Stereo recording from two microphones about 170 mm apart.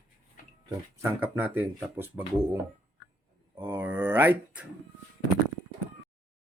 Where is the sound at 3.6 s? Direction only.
10° right (ahead or behind).